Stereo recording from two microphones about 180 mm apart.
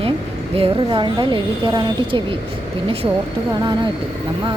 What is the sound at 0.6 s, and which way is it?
A woman's voice, 30° right (ahead or behind).